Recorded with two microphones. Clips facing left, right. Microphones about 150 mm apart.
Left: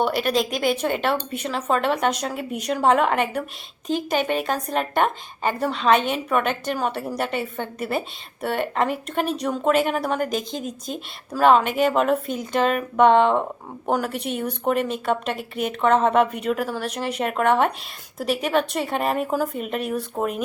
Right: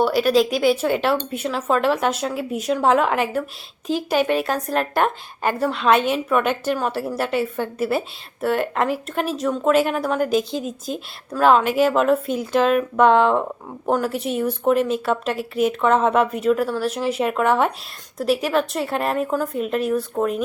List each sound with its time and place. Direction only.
0.0 s a woman's voice: 5° right (ahead or behind)